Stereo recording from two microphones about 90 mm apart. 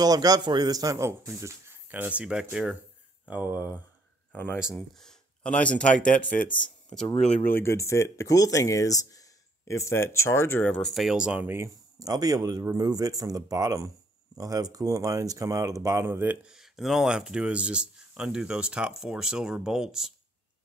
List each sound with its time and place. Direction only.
0.0 s speech: 45° right (ahead or behind); by 2.8 s 5° right (ahead or behind)
3.3 s speech: 20° right (ahead or behind)
4.9 s speech: 10° left (ahead or behind)
7.4 s speech: 25° left (ahead or behind)
10.7 s speech: 5° left (ahead or behind)
11.3 s speech: 25° right (ahead or behind)
11.7 s speech: 45° right (ahead or behind)
16.1 s speech: 25° right (ahead or behind)
16.4 s speech: 5° right (ahead or behind)